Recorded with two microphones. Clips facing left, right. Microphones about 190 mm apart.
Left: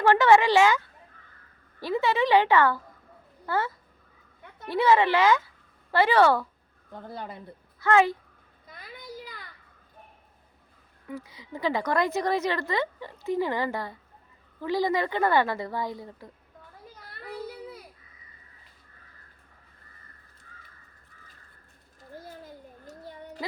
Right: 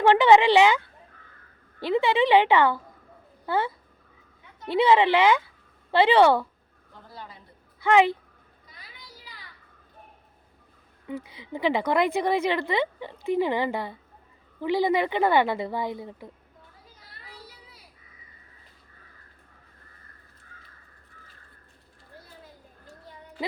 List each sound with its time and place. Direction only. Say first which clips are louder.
0.0 s a woman's voice: right 2 dB; 20° right (ahead or behind)
1.8 s a woman's voice: right 3 dB; 20° right (ahead or behind)
4.6 s a woman's voice: right 2 dB; 20° right (ahead or behind)
6.9 s speech: left 7 dB; 55° left (ahead or behind)
7.9 s speech: right 2 dB; 15° right (ahead or behind)
8.6 s children playing: left 9 dB; 50° left (ahead or behind)
11.1 s a woman's voice: right 3 dB; 20° right (ahead or behind)
17.2 s children playing: left 13 dB; 55° left (ahead or behind)